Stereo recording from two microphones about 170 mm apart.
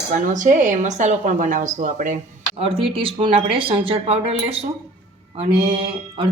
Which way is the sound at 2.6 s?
35° right (ahead or behind).